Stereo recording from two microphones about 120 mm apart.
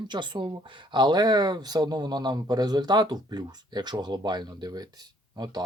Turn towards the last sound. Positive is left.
turn(degrees=-40)  # may be behind; listen again after turning